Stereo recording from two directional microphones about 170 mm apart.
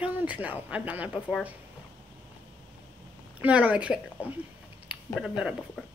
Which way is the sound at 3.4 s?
10° right (ahead or behind).